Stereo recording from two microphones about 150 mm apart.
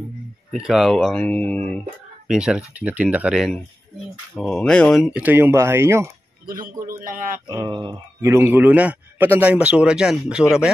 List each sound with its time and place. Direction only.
0.5 s speech: centre (ahead or behind)
2.2 s speech: 5° right (ahead or behind)
5.2 s a man's voice: 15° right (ahead or behind)
6.8 s a man's voice: 65° right (ahead or behind)
7.4 s a man's voice: 25° right (ahead or behind); by 10.4 s 5° right (ahead or behind)